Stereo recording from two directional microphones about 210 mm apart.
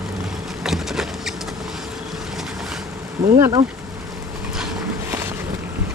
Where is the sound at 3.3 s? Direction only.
25° right (ahead or behind).